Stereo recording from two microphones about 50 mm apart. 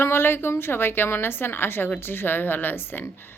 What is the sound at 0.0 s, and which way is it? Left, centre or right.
A woman's voice, left.